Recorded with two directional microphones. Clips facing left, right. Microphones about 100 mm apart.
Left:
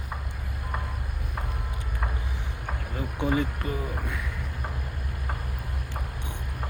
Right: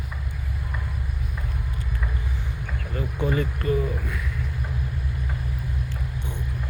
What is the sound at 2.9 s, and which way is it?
Speech, 20° left (ahead or behind).